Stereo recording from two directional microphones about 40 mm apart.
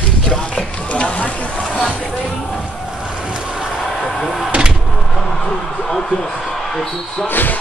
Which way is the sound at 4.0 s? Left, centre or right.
Centre.